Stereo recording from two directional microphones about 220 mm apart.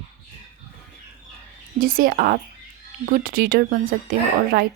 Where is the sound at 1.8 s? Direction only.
40° right (ahead or behind).